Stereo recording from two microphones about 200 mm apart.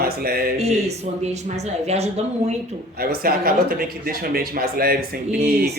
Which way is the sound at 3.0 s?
50° right (ahead or behind).